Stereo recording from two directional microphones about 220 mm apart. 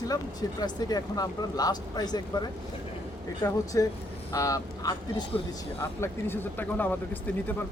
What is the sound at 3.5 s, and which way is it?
Speech, 15° left (ahead or behind).